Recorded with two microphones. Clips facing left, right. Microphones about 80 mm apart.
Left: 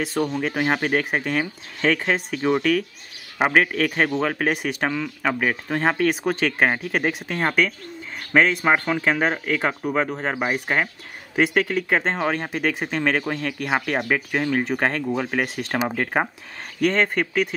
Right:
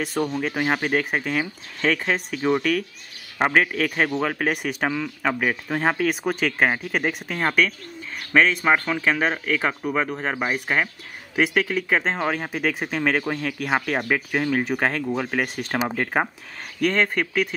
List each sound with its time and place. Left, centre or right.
0.0 s speech: centre